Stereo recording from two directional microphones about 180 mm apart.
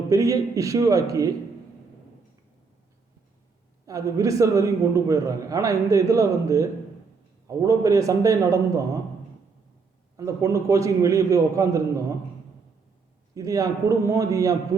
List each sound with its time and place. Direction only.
0.1 s a man's voice: 20° right (ahead or behind)
3.8 s a man's voice: 20° right (ahead or behind)
10.2 s a man's voice: 15° right (ahead or behind)
13.3 s a man's voice: 20° right (ahead or behind)